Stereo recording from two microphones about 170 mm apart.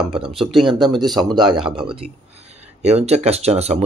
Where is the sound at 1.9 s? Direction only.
35° right (ahead or behind).